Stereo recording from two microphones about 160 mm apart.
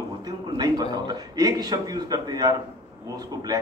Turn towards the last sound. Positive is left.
turn(degrees=-25)  # may be behind; listen again after turning